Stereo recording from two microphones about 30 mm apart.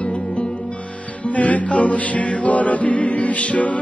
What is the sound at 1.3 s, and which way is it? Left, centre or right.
Music, left.